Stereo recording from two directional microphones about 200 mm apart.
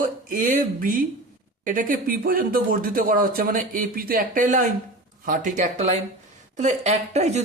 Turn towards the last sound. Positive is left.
turn(degrees=-35)  # may be behind; listen again after turning